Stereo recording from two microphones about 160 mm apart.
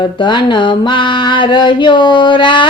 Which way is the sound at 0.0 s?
30° left (ahead or behind).